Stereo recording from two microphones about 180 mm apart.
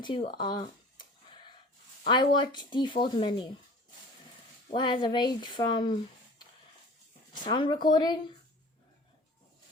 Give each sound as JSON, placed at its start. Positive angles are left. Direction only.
{"t": 0.3, "sound": "speech", "side_deg": 25}
{"t": 2.0, "sound": "speech", "side_deg": 25}
{"t": 4.7, "sound": "speech", "side_deg": 25}
{"t": 7.4, "sound": "speech", "side_deg": 25}